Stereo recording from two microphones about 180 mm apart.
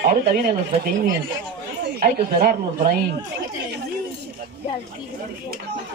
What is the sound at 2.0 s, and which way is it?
Speech, 60° right (ahead or behind).